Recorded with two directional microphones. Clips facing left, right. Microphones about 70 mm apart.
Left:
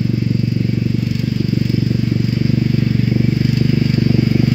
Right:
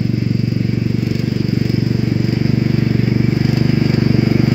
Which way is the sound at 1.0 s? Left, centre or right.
Centre.